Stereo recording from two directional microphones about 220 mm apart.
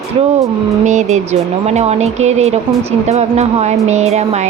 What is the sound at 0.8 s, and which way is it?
Speech, 35° right (ahead or behind).